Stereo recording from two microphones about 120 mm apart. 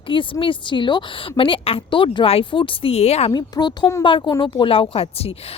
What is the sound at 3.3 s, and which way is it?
Speech, 35° left (ahead or behind).